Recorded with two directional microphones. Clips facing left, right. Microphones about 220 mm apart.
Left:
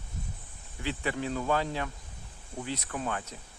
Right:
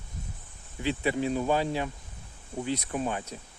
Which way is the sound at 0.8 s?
20° right (ahead or behind).